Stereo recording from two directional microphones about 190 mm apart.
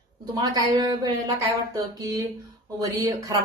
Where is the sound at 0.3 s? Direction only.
20° right (ahead or behind).